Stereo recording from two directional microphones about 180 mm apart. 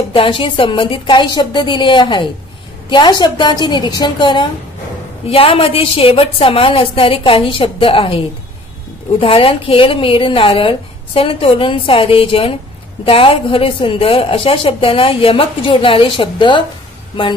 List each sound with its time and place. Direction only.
0.1 s a woman's voice: 30° left (ahead or behind)
9.2 s a woman's voice: 30° left (ahead or behind)